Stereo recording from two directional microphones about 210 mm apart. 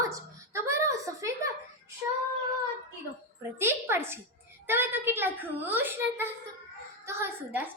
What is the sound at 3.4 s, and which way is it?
A child's voice, 10° right (ahead or behind).